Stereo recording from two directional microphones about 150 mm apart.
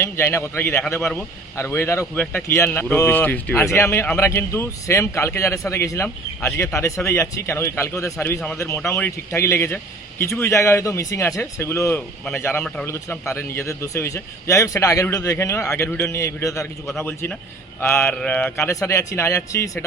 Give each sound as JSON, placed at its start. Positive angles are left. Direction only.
{"t": 0.0, "sound": "a man's voice", "side_deg": 15}